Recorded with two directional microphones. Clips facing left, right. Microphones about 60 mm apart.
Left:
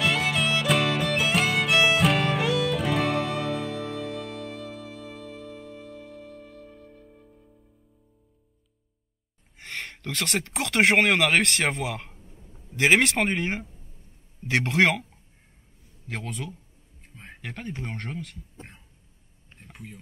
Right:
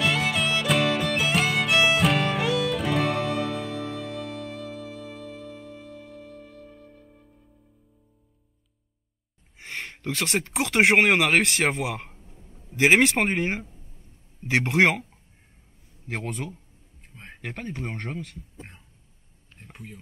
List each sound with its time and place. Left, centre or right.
0.0 s music: centre
9.6 s a man's voice: centre
16.1 s speech: right
19.6 s speech: centre